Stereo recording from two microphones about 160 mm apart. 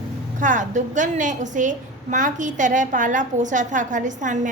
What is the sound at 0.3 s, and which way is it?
A woman's voice, 50° right (ahead or behind).